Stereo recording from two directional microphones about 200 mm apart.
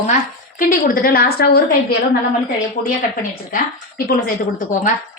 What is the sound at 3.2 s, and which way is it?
A woman's voice, 45° left (ahead or behind).